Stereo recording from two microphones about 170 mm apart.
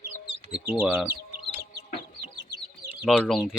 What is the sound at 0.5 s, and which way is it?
Speech, 5° right (ahead or behind).